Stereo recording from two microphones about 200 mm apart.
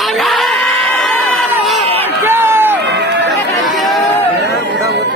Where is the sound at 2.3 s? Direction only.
10° right (ahead or behind).